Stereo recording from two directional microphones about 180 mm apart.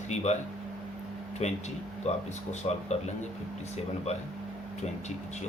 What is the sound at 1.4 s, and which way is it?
Speech, 40° left (ahead or behind).